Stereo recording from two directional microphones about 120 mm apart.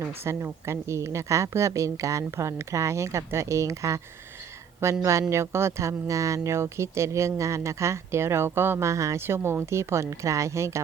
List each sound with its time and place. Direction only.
0.3 s speech: 20° right (ahead or behind)